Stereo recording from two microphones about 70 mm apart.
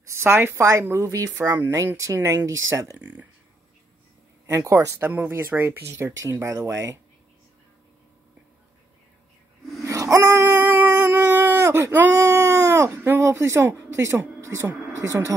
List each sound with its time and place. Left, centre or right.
0.0 s speech: right
0.7 s speech: right
3.0 s speech: right
4.5 s speech: right
5.0 s speech: right
9.8 s a sound: right
12.2 s speech: right